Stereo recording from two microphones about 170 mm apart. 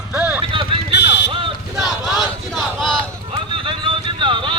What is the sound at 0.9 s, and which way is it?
Vehicle, 90° left.